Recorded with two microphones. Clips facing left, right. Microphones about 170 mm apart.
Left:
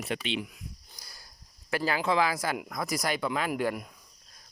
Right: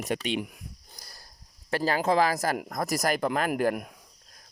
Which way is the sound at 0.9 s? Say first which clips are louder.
Right 2 dB; 45° right (ahead or behind).